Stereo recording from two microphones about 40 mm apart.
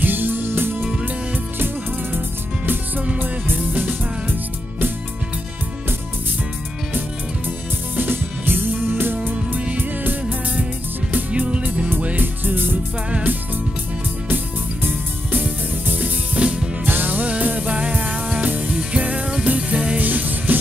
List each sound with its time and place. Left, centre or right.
0.0 s music: right
2.1 s music: right
7.4 s music: right
9.3 s music: right
12.2 s music: right
14.3 s music: right
16.3 s music: right
16.8 s music: right